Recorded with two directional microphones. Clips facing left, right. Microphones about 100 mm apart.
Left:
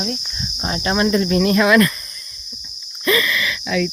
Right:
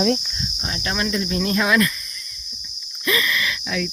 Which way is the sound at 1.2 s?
80° left.